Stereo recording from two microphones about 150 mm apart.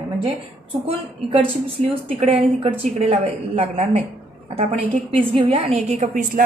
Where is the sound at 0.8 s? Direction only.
40° right (ahead or behind).